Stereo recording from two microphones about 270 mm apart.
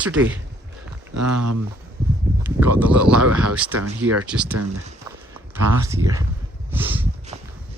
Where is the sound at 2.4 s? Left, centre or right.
Centre.